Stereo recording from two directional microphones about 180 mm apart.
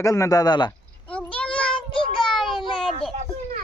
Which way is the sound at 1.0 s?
10° left (ahead or behind).